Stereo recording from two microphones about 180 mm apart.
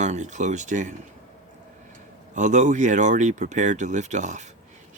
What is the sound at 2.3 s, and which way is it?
Speech, 45° right (ahead or behind).